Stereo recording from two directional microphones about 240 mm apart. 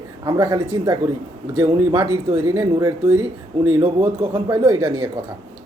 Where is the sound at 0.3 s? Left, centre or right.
Centre.